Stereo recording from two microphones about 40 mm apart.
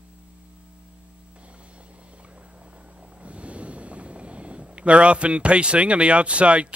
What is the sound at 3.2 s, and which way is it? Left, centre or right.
A man's voice, right.